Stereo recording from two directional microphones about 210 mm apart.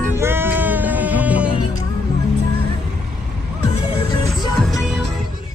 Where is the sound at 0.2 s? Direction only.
10° right (ahead or behind).